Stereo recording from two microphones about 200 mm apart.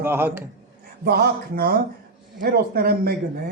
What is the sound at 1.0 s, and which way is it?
Speech, 50° right (ahead or behind).